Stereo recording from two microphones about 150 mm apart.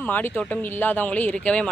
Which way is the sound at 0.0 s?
10° left (ahead or behind).